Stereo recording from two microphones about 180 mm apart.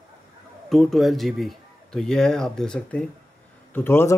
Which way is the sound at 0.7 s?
Centre (ahead or behind).